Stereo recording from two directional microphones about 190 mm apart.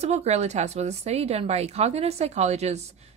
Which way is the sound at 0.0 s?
35° right (ahead or behind).